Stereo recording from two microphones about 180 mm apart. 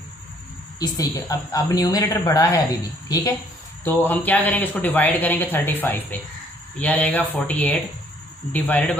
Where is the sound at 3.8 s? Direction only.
10° left (ahead or behind).